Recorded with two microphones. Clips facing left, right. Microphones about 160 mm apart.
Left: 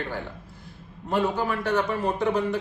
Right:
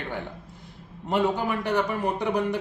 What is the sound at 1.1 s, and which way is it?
Speech, 15° right (ahead or behind).